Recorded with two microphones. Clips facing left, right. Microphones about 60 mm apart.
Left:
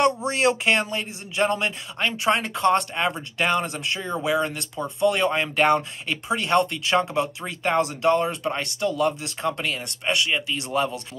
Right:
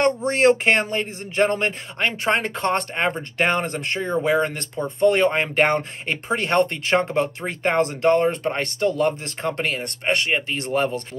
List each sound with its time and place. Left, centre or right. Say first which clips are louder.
0.3 s speech: right 4 dB; right